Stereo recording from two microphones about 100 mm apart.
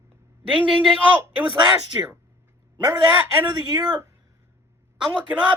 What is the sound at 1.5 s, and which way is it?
Speech, 50° right (ahead or behind).